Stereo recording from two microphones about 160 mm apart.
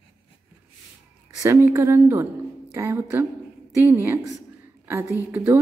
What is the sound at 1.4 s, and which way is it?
Speech, 15° right (ahead or behind).